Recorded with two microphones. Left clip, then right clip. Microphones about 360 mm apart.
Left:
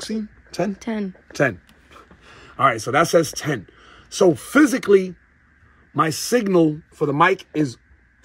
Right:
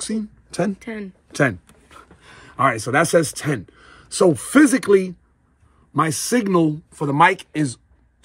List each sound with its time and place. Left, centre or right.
0.0 s speech: right
0.7 s speech: centre
1.3 s a sound: right
2.8 s speech: right